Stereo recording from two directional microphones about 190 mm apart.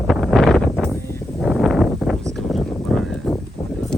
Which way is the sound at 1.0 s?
15° left (ahead or behind).